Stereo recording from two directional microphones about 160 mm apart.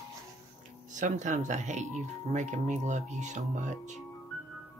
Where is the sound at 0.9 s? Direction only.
50° right (ahead or behind).